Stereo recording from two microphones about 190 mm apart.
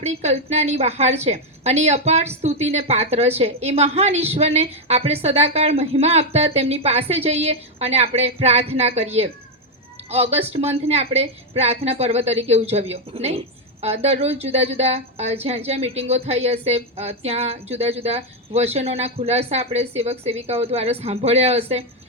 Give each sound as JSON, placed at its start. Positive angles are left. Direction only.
{"t": 0.0, "sound": "a woman's voice", "side_deg": -35}